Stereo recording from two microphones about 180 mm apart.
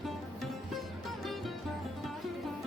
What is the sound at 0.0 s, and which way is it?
Music, centre (ahead or behind).